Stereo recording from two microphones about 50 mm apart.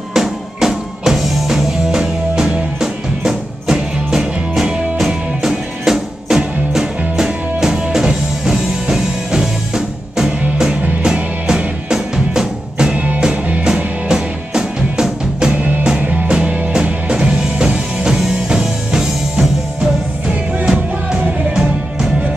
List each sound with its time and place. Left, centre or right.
0.1 s music: centre
1.9 s music: centre
15.5 s music: right; by 22.3 s centre